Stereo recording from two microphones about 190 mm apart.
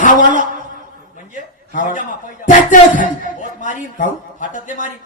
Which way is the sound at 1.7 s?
45° left (ahead or behind).